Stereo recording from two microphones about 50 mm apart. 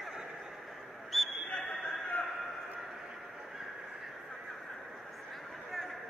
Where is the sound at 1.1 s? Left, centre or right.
Centre.